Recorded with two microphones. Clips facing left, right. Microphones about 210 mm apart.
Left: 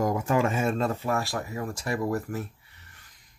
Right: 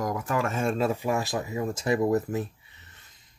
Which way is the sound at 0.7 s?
10° right (ahead or behind).